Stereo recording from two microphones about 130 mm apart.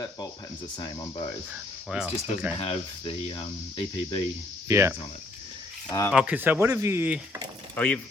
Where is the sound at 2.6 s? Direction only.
45° left (ahead or behind).